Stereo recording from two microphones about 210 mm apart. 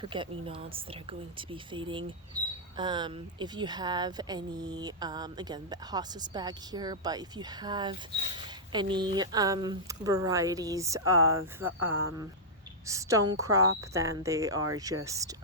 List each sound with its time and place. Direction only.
0.0 s speech: 25° right (ahead or behind)